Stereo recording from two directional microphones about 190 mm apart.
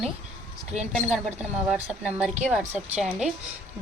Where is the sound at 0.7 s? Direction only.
35° right (ahead or behind).